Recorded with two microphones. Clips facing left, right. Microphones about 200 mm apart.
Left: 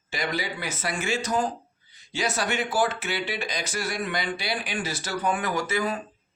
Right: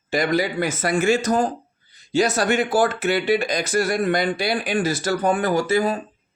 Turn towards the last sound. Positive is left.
turn(degrees=-35)  # may be behind; listen again after turning